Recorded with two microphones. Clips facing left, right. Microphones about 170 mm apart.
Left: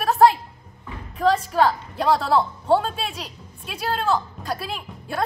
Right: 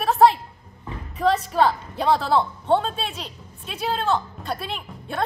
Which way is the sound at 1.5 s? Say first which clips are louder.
Even; centre (ahead or behind).